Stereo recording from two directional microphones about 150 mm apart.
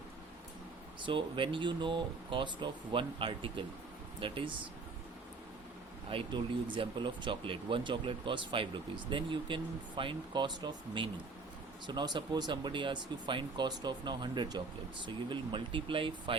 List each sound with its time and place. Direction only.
1.0 s speech: 35° right (ahead or behind)
6.1 s speech: 35° right (ahead or behind)